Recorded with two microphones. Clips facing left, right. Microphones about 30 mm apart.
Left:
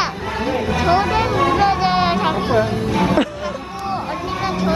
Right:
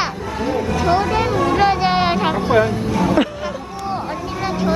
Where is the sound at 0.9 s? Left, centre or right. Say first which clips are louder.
Left 1 dB; centre.